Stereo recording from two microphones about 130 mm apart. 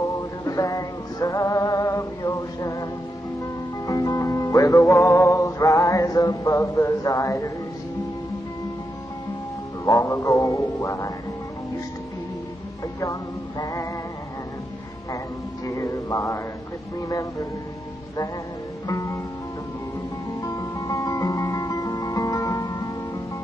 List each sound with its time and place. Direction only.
0.0 s music: 25° left (ahead or behind)
9.8 s speech: 25° left (ahead or behind)
13.0 s speech: 25° left (ahead or behind)
15.6 s speech: 25° left (ahead or behind)
18.9 s music: 25° left (ahead or behind)
20.4 s music: 25° left (ahead or behind)